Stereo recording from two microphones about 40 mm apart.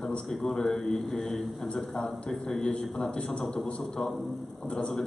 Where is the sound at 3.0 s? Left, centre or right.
Left.